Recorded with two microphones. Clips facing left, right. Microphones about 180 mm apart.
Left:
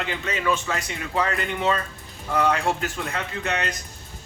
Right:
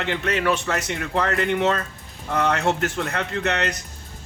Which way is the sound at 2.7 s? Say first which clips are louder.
Right 4 dB; 70° right (ahead or behind).